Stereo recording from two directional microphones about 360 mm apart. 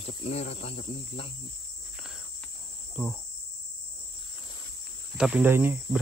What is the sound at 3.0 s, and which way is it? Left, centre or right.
Speech, centre.